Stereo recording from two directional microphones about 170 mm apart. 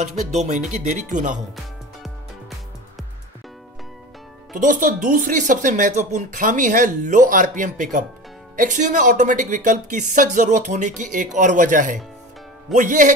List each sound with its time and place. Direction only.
0.0 s speech: 40° right (ahead or behind)
4.6 s speech: 50° right (ahead or behind)